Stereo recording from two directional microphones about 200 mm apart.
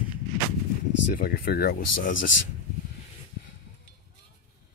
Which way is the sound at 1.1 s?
50° left (ahead or behind).